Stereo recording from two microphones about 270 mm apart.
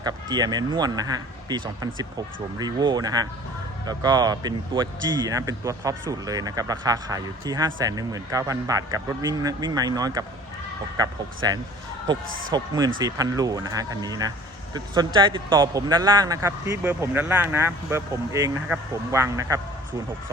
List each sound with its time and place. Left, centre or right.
0.0 s speech: centre
11.4 s speech: centre